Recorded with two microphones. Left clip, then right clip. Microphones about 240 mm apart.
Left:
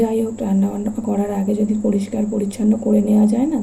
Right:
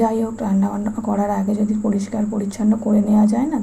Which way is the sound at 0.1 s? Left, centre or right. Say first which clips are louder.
Left 1 dB; right.